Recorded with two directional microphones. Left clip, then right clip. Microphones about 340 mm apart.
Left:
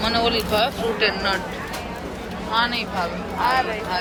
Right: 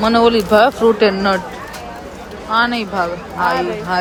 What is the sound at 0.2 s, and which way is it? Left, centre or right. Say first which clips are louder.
Speech: right 11 dB; right.